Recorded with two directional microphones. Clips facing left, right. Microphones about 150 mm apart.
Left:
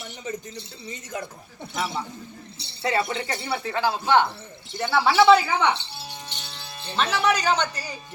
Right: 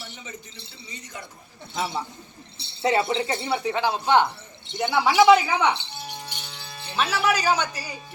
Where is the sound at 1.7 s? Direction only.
25° right (ahead or behind).